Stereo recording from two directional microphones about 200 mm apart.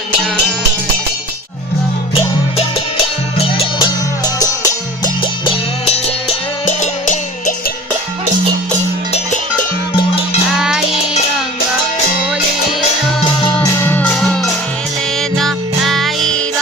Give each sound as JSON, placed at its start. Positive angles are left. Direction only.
{"t": 3.3, "sound": "music", "side_deg": 25}
{"t": 5.8, "sound": "music", "side_deg": 30}
{"t": 10.5, "sound": "music", "side_deg": 0}
{"t": 13.7, "sound": "music", "side_deg": 10}